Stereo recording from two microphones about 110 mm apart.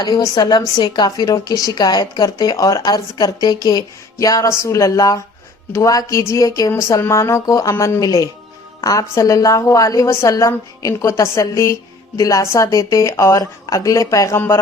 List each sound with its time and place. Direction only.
0.0 s a woman's voice: 40° left (ahead or behind); by 14.6 s 20° left (ahead or behind)